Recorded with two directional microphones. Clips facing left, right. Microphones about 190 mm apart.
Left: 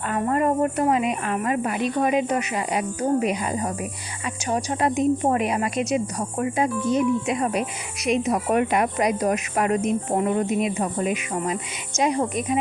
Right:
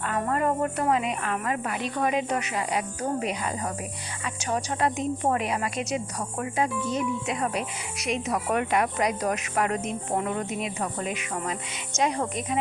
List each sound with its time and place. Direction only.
0.1 s a woman's voice: 20° left (ahead or behind)